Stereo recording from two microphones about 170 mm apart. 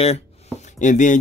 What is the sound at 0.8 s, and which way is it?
Speech, 45° left (ahead or behind).